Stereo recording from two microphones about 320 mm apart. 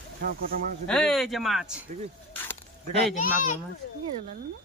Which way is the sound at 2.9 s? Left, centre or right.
Left.